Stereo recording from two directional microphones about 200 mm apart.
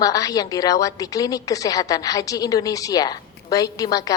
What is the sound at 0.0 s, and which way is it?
A woman's voice, 15° left (ahead or behind).